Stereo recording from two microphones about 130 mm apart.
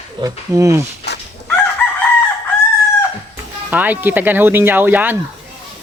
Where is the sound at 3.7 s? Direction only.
15° right (ahead or behind).